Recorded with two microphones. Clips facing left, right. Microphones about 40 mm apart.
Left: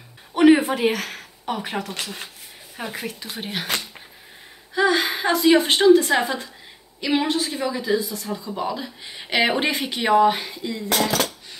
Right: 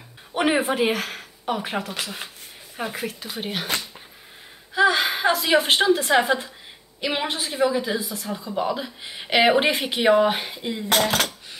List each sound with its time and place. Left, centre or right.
0.4 s a woman's voice: centre
4.7 s a woman's voice: centre
10.9 s speech: right